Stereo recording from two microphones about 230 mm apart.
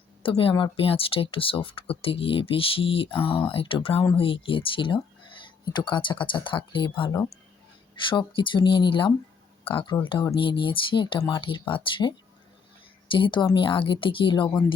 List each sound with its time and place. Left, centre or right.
0.2 s speech: left
3.2 s speech: centre
3.4 s speech: left